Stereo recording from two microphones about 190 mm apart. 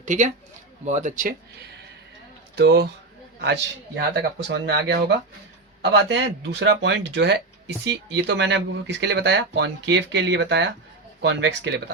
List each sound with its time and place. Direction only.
0.0 s speech: 40° right (ahead or behind)
2.6 s speech: 60° right (ahead or behind)